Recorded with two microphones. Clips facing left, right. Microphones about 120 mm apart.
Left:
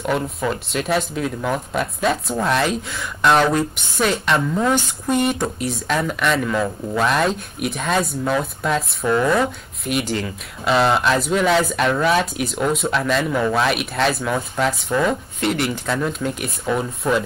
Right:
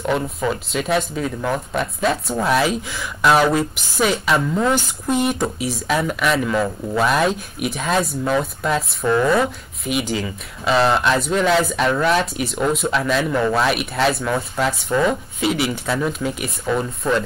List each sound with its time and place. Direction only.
0.0 s speech: centre (ahead or behind)